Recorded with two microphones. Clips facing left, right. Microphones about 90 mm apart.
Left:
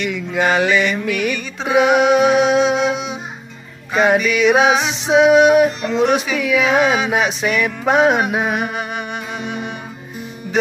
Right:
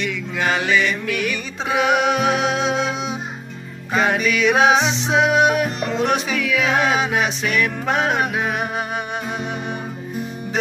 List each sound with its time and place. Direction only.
0.1 s mantra: 20° left (ahead or behind)
1.7 s music: 20° left (ahead or behind)
3.9 s music: 20° left (ahead or behind)